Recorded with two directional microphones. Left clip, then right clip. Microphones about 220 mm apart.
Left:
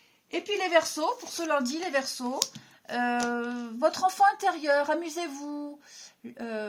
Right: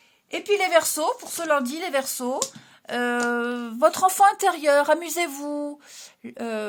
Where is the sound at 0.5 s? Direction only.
45° right (ahead or behind).